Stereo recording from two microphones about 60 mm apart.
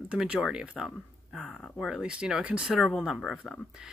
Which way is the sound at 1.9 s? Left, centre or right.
Centre.